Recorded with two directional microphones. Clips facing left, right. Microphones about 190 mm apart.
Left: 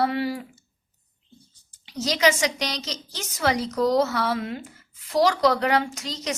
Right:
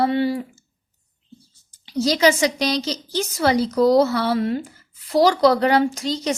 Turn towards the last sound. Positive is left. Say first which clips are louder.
# right 7 dB
turn(degrees=-30)  # may be behind; listen again after turning